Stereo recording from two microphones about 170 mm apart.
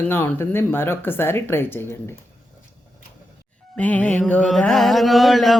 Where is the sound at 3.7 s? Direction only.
10° left (ahead or behind).